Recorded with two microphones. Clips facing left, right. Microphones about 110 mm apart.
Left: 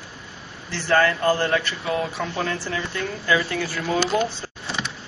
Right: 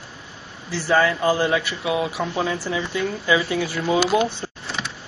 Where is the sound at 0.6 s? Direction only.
10° right (ahead or behind).